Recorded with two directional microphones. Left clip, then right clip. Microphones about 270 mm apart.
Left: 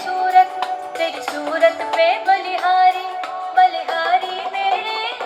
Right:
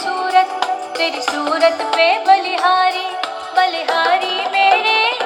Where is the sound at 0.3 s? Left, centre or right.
Right.